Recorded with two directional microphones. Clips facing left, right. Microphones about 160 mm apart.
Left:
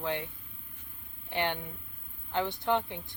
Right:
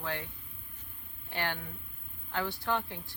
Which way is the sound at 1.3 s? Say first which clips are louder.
Left 4 dB; 20° left (ahead or behind).